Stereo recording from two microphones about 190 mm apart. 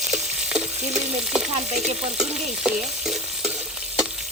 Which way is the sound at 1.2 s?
Centre (ahead or behind).